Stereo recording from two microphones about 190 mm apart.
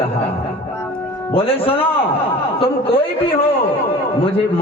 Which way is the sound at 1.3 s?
30° left (ahead or behind).